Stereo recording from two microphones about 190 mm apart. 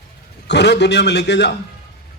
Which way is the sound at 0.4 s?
65° left (ahead or behind).